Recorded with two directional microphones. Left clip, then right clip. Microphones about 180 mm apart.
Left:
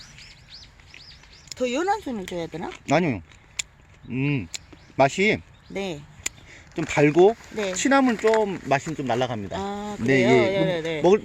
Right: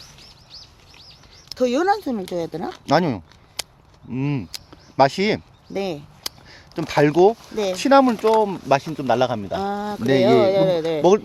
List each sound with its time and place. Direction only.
0.5 s bird: 75° right (ahead or behind)
1.5 s speech: 45° right (ahead or behind)
2.7 s a sound: 5° right (ahead or behind)
4.2 s speech: 5° right (ahead or behind)
5.7 s speech: 40° right (ahead or behind)
6.2 s a sound: centre (ahead or behind)
7.5 s speech: 45° right (ahead or behind)
7.8 s speech: centre (ahead or behind)
9.5 s speech: 40° right (ahead or behind)